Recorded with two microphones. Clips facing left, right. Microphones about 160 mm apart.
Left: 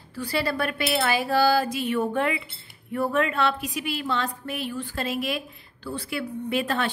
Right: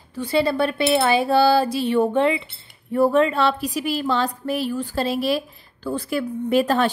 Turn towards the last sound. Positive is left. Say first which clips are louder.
# right 7 dB
turn(degrees=-40)  # may be behind; listen again after turning